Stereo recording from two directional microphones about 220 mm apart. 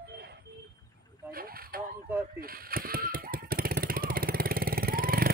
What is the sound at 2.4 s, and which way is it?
Vehicle, 40° right (ahead or behind).